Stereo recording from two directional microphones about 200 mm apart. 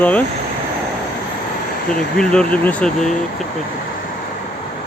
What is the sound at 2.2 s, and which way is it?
Speech, 5° left (ahead or behind).